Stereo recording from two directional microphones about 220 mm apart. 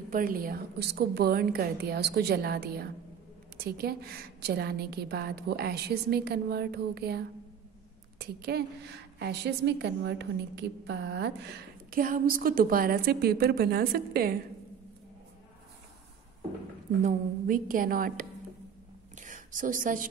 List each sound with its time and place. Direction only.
0.1 s a woman's voice: 40° right (ahead or behind)
17.0 s a woman's voice: 40° right (ahead or behind)
19.1 s a sound: 35° right (ahead or behind)